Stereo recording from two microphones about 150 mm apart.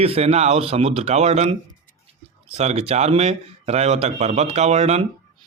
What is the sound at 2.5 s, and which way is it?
Speech, 45° right (ahead or behind).